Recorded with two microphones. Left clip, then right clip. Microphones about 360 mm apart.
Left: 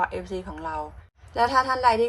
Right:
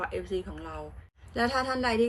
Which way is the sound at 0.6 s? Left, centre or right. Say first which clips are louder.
Left 10 dB; left.